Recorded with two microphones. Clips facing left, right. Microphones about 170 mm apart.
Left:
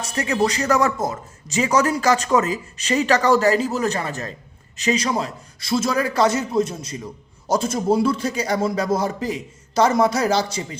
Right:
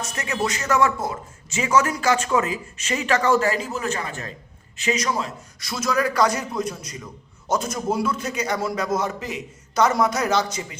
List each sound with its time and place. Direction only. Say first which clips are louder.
0.0 s a man's voice: left 5 dB; 35° left (ahead or behind)